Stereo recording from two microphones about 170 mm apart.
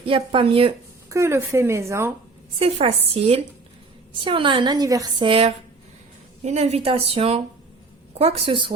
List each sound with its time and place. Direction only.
0.0 s a woman's voice: 30° right (ahead or behind)
1.1 s speech: 15° right (ahead or behind)
2.6 s a woman's voice: 35° right (ahead or behind)
5.3 s a woman's voice: 35° right (ahead or behind)